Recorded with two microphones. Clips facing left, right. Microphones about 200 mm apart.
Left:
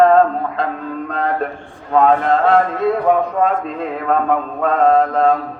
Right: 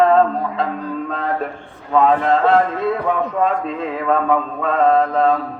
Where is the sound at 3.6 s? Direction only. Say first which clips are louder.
Even; centre (ahead or behind).